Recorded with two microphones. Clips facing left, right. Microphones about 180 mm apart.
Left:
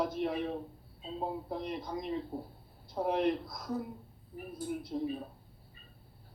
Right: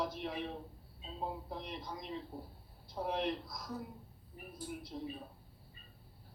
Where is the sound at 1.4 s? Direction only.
55° left (ahead or behind).